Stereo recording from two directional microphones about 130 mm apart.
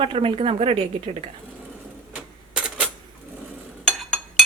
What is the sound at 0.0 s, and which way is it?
Speech, 45° right (ahead or behind).